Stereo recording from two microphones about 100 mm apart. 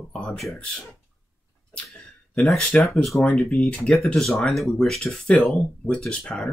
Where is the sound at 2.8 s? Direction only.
Centre (ahead or behind).